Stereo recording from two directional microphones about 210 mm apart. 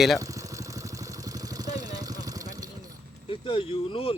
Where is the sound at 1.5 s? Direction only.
20° right (ahead or behind).